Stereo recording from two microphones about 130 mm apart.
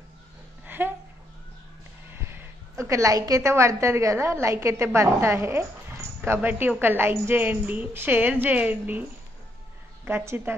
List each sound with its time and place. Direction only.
0.7 s a sound: 15° right (ahead or behind)
2.0 s a woman's voice: 20° right (ahead or behind)
10.0 s a woman's voice: 15° right (ahead or behind)